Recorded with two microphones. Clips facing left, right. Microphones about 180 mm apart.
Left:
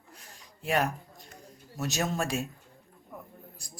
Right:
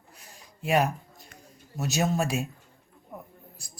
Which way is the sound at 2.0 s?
5° right (ahead or behind).